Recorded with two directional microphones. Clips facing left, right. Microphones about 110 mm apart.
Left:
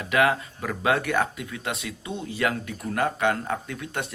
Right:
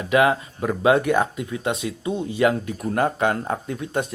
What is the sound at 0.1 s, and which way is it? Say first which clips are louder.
Speech: right 4 dB; 25° right (ahead or behind).